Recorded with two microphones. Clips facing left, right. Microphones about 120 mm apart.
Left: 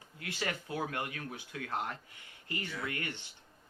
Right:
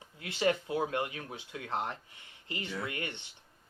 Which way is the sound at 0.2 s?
20° right (ahead or behind).